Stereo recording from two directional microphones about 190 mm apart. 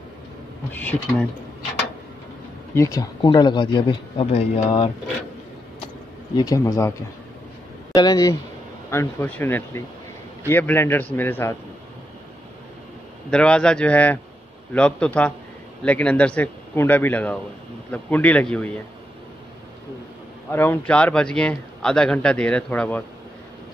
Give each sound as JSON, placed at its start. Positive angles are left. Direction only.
{"t": 0.9, "sound": "speech", "side_deg": 20}
{"t": 2.7, "sound": "speech", "side_deg": 15}
{"t": 6.3, "sound": "speech", "side_deg": 20}
{"t": 7.9, "sound": "a man's voice", "side_deg": 20}
{"t": 13.3, "sound": "a man's voice", "side_deg": 5}
{"t": 20.5, "sound": "a man's voice", "side_deg": 10}